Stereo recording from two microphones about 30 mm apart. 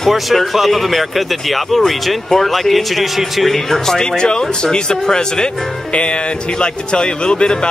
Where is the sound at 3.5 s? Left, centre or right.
Centre.